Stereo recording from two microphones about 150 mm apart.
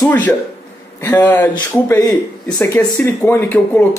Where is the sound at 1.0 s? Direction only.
10° left (ahead or behind).